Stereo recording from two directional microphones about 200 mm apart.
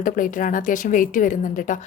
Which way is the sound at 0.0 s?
40° left (ahead or behind).